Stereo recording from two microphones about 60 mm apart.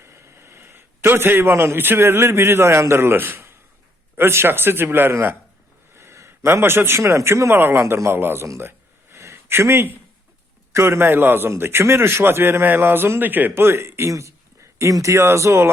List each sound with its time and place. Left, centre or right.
0.0 s a man's voice: right
5.9 s a man's voice: right
7.5 s a man's voice: right
9.1 s a sound: right
10.7 s a man's voice: right
13.5 s speech: right
14.1 s speech: right